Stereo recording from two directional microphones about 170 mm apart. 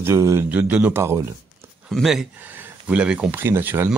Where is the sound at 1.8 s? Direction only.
Centre (ahead or behind).